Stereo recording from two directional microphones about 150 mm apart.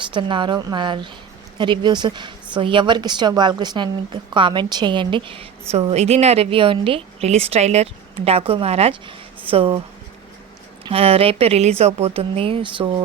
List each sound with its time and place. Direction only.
0.0 s a woman's voice: 35° right (ahead or behind)
10.8 s a woman's voice: 40° right (ahead or behind)